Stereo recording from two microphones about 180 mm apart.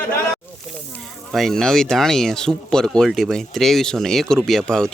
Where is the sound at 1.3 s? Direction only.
Centre (ahead or behind).